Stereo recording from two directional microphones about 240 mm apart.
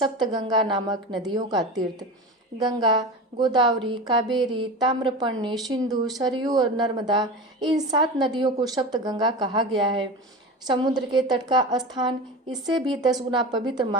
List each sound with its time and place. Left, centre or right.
0.0 s a woman's voice: centre